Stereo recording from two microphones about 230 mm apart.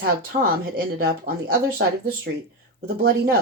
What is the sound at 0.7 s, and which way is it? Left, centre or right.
Speech, right.